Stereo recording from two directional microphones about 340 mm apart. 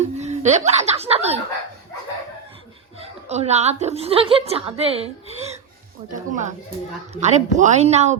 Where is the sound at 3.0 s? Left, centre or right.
Centre.